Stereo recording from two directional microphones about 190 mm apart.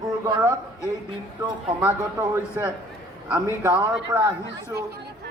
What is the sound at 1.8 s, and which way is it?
A man's voice, 15° right (ahead or behind).